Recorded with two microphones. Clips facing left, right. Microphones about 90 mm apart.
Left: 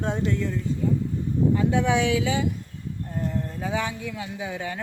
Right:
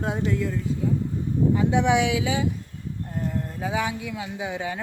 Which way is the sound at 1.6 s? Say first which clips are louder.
Right 1 dB; 20° right (ahead or behind).